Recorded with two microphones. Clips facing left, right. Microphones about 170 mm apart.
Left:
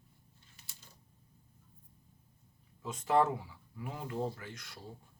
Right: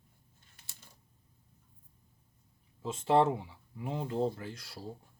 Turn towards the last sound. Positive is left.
turn(degrees=-30)  # may be behind; listen again after turning